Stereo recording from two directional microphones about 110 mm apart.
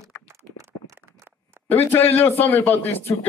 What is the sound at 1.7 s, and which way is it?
A man's voice, 20° left (ahead or behind).